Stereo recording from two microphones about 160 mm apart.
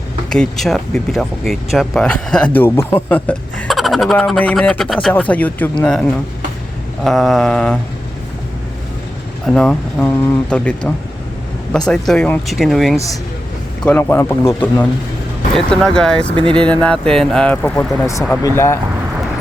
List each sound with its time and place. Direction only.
0.3 s speech: 5° left (ahead or behind)
3.7 s speech: centre (ahead or behind)
9.5 s speech: 5° left (ahead or behind)
14.0 s speech: 15° left (ahead or behind)